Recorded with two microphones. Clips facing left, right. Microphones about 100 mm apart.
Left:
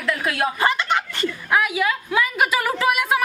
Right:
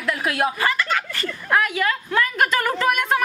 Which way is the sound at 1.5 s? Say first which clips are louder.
Right 1 dB; 5° left (ahead or behind).